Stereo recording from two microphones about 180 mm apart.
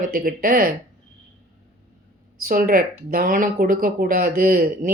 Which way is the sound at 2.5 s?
50° right (ahead or behind).